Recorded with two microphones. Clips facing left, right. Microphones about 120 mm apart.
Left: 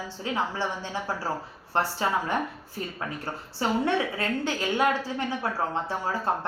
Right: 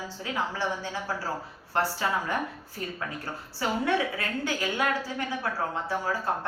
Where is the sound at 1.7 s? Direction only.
20° left (ahead or behind).